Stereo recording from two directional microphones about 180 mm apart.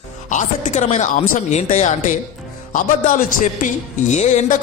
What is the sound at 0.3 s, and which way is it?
A man's voice, 45° left (ahead or behind).